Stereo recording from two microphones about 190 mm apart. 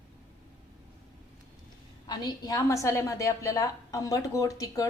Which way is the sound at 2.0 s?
20° left (ahead or behind).